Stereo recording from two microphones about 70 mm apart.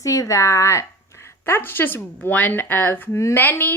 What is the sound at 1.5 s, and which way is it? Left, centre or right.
Speech, left.